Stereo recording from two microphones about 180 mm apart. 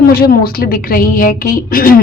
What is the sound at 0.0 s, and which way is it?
A woman's voice, 55° left (ahead or behind).